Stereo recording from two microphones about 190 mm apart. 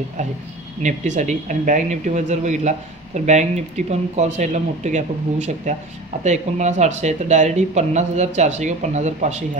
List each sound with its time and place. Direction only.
0.8 s speech: 40° right (ahead or behind)